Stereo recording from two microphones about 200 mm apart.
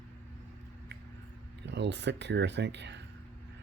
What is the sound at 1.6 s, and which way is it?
Speech, 60° right (ahead or behind).